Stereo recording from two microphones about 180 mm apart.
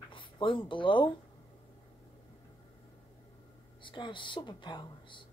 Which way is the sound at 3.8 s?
25° left (ahead or behind).